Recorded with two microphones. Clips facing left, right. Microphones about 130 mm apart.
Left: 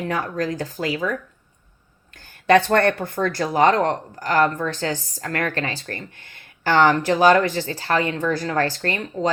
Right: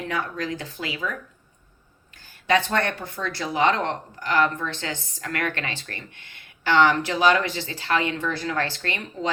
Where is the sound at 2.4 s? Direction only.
55° left (ahead or behind).